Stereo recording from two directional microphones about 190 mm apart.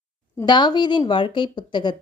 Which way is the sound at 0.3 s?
25° left (ahead or behind).